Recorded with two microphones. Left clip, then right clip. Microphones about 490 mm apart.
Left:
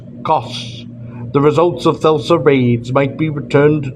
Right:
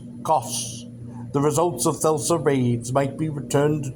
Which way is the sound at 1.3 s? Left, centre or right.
Right.